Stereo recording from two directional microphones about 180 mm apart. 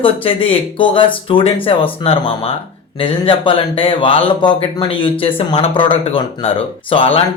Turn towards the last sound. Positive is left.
turn(degrees=30)  # may be behind; listen again after turning